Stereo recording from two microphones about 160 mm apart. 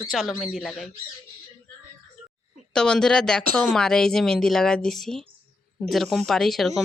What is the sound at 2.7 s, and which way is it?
A woman's voice, 5° left (ahead or behind).